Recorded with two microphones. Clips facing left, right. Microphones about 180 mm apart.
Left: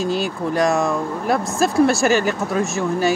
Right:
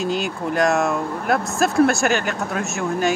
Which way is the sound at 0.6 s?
Centre (ahead or behind).